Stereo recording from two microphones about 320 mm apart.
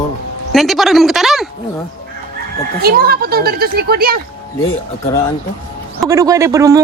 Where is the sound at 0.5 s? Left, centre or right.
Centre.